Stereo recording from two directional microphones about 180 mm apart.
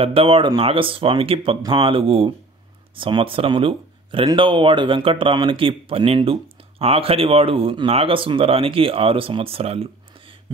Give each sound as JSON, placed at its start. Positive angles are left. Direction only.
{"t": 0.0, "sound": "speech", "side_deg": -30}